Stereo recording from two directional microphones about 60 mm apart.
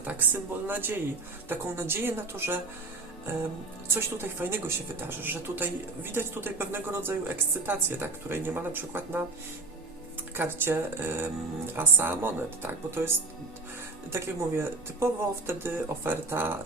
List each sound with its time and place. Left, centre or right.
0.7 s a woman's voice: right
3.3 s music: right
3.8 s a woman's voice: right
10.3 s a woman's voice: right
14.1 s a woman's voice: right